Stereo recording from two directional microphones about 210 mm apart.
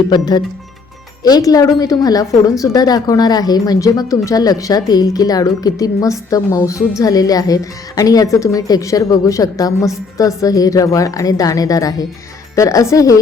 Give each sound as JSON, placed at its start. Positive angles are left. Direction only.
{"t": 0.1, "sound": "a woman's voice", "side_deg": 20}